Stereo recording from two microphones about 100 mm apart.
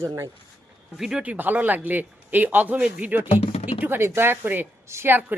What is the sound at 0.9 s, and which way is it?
A man's voice, 5° right (ahead or behind).